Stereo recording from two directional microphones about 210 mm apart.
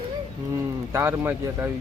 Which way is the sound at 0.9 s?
10° right (ahead or behind).